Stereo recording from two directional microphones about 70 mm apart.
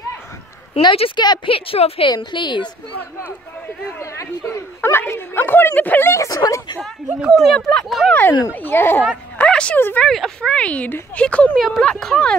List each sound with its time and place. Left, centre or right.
0.8 s a woman's voice: left
4.0 s speech: left
6.2 s speech: left
7.1 s speech: centre
7.4 s speech: centre
8.1 s speech: left
9.4 s speech: centre
9.8 s speech: left
10.0 s speech: centre
10.5 s speech: centre
11.5 s speech: centre